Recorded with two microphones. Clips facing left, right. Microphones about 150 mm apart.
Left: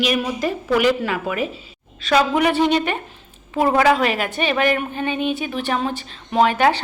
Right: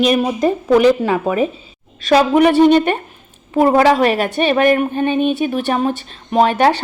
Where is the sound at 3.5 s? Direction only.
35° right (ahead or behind).